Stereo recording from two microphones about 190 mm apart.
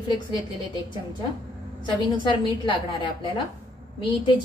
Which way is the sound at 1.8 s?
25° left (ahead or behind).